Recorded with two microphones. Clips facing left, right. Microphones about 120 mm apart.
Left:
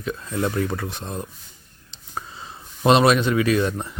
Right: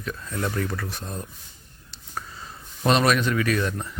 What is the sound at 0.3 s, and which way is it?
Speech, 25° left (ahead or behind).